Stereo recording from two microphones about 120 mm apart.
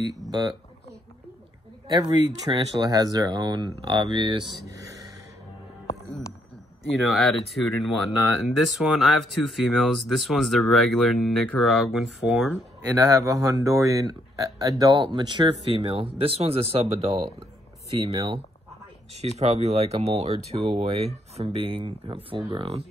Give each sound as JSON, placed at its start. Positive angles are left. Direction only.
{"t": 0.3, "sound": "speech", "side_deg": -35}
{"t": 1.9, "sound": "speech", "side_deg": -35}
{"t": 7.0, "sound": "speech", "side_deg": 0}
{"t": 13.0, "sound": "speech", "side_deg": -25}
{"t": 19.1, "sound": "speech", "side_deg": -65}